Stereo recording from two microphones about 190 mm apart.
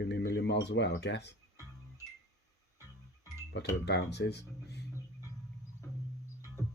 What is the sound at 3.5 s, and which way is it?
Speech, 60° left (ahead or behind).